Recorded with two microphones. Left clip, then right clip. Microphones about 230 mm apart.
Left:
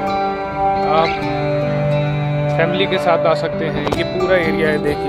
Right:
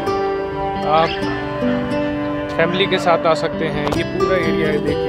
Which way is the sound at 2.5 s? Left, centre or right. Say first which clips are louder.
Left 1 dB; centre.